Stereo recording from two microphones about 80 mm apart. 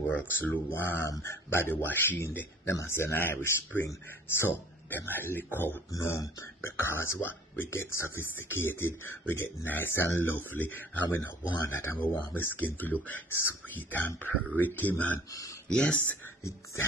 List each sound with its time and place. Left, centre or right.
0.0 s speech: left
1.0 s speech: left
5.9 s speech: left; by 16.2 s centre